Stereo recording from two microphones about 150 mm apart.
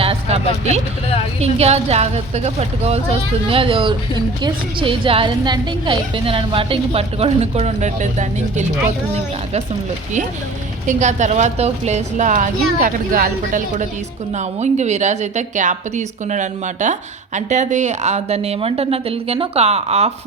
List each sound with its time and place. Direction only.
0.0 s a sound: 40° right (ahead or behind)
1.4 s a woman's voice: 45° right (ahead or behind)
10.8 s a woman's voice: 55° right (ahead or behind)
14.3 s a woman's voice: 50° right (ahead or behind)